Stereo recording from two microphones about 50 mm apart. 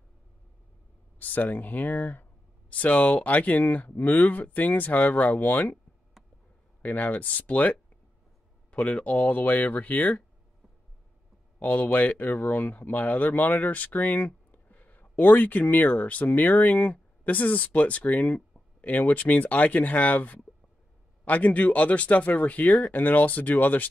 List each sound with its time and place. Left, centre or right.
1.2 s speech: left
6.8 s speech: left
9.0 s speech: left
11.6 s speech: left